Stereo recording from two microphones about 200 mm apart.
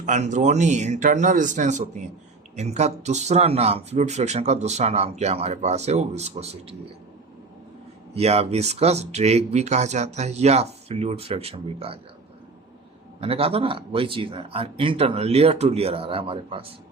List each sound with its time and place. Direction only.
0.0 s speech: 35° right (ahead or behind)
8.1 s speech: 30° right (ahead or behind)
13.1 s a man's voice: 30° right (ahead or behind)